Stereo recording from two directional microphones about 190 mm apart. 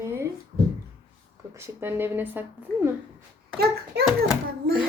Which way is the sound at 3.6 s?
55° right (ahead or behind).